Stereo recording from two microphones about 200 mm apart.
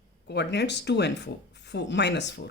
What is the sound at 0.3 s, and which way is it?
Speech, 60° left (ahead or behind).